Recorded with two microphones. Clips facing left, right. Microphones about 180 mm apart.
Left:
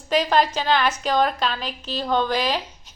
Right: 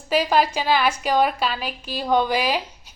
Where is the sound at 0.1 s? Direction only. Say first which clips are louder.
Even; 10° right (ahead or behind).